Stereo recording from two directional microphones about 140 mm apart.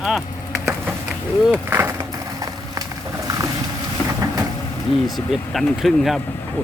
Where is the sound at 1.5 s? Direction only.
15° right (ahead or behind).